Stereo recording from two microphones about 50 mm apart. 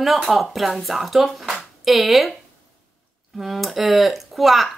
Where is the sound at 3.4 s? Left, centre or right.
Centre.